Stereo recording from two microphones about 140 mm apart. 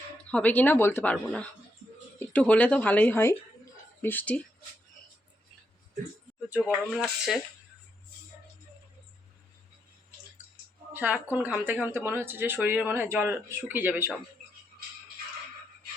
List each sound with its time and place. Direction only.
0.3 s speech: 10° left (ahead or behind)
1.1 s speech: 5° left (ahead or behind)
6.5 s speech: centre (ahead or behind)
10.9 s speech: 10° right (ahead or behind)